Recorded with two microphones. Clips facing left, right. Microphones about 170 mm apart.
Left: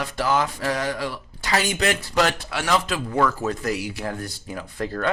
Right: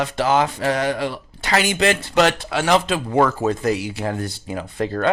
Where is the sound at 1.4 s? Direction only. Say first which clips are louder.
Right 3 dB; 60° right (ahead or behind).